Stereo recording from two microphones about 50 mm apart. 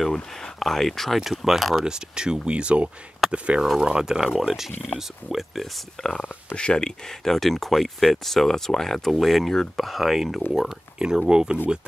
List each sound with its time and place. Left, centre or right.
0.1 s speech: centre
1.9 s speech: centre
3.6 s speech: centre
6.0 s speech: centre